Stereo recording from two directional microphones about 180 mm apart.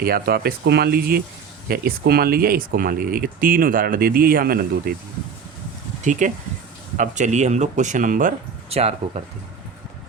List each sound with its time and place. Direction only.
0.0 s speech: 55° right (ahead or behind)
6.1 s speech: 45° right (ahead or behind)
8.7 s speech: 35° right (ahead or behind)